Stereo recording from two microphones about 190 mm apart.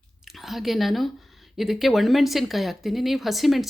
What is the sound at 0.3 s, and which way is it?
Speech, centre (ahead or behind).